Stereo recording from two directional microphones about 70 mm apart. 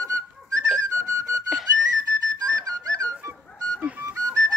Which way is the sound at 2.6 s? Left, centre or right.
Right.